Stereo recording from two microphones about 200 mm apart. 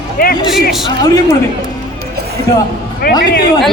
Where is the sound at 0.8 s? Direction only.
20° left (ahead or behind).